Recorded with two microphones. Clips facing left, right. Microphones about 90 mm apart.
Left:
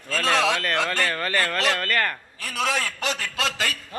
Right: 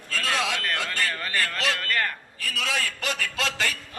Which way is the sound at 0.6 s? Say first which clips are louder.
Left 4 dB; 70° left (ahead or behind).